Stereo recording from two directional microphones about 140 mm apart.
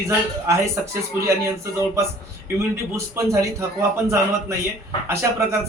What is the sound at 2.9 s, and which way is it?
A man's voice, 20° right (ahead or behind).